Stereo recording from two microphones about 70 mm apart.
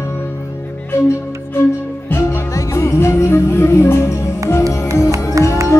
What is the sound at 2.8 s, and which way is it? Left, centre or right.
Music, left.